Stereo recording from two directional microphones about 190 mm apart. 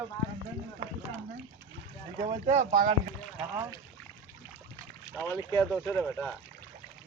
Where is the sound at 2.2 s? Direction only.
35° right (ahead or behind).